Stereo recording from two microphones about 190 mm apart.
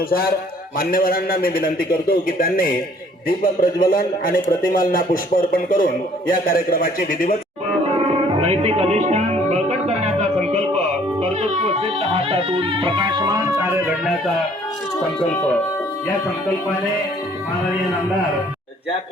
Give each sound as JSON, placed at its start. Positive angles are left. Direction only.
{"t": 0.8, "sound": "speech", "side_deg": 50}
{"t": 7.9, "sound": "music", "side_deg": -30}
{"t": 13.7, "sound": "speech", "side_deg": -10}